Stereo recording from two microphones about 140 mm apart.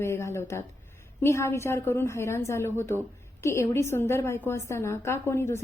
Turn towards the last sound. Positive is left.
turn(degrees=20)  # may be behind; listen again after turning